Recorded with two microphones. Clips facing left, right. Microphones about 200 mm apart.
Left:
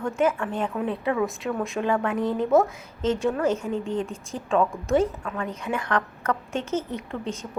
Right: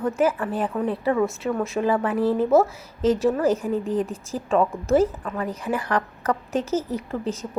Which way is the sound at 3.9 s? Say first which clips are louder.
Right 3 dB; 30° left (ahead or behind).